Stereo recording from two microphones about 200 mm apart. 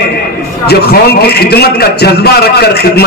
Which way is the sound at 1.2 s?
55° left (ahead or behind).